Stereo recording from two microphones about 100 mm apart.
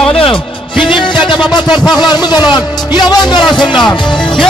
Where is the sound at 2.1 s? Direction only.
45° left (ahead or behind).